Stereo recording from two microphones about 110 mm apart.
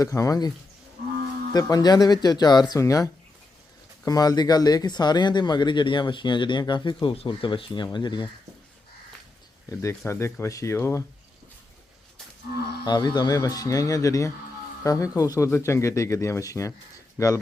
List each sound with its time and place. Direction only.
0.0 s speech: 30° left (ahead or behind)
1.5 s speech: 35° left (ahead or behind)
10.1 s speech: 25° left (ahead or behind)
12.8 s speech: 40° left (ahead or behind)